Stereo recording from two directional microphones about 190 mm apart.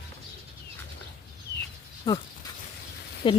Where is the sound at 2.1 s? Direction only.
20° left (ahead or behind).